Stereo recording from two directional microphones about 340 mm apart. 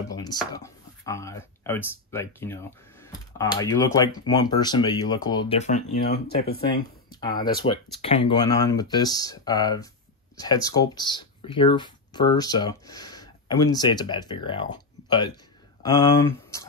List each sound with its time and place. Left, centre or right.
0.1 s chopping: centre
1.0 s speech: centre; by 6.6 s left
6.7 s speech: centre